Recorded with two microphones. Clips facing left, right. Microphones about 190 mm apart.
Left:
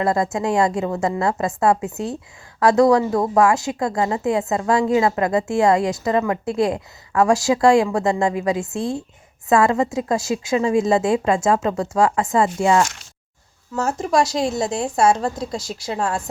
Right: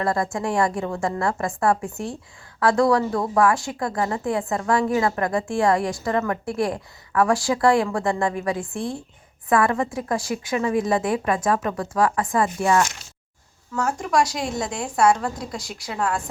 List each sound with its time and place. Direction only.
0.0 s a woman's voice: 20° left (ahead or behind)